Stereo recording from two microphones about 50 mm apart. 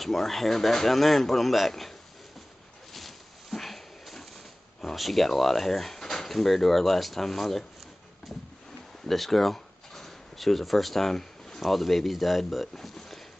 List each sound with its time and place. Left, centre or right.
0.0 s speech: centre
2.9 s a sound: centre
4.9 s speech: centre
9.0 s speech: centre